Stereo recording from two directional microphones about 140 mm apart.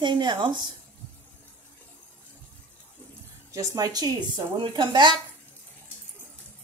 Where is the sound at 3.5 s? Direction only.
25° right (ahead or behind).